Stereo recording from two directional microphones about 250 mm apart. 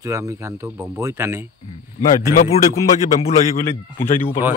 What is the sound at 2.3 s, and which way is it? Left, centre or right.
Speech, left.